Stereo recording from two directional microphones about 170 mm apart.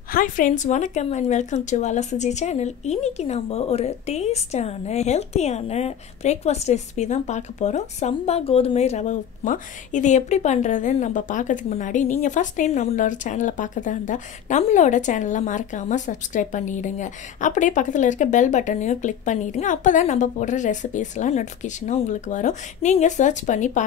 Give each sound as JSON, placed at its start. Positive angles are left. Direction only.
{"t": 0.1, "sound": "speech", "side_deg": 50}